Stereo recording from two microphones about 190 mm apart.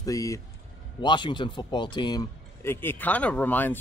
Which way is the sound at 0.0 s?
20° left (ahead or behind).